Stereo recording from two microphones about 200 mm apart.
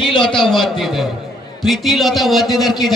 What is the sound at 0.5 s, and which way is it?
A man's voice, centre (ahead or behind).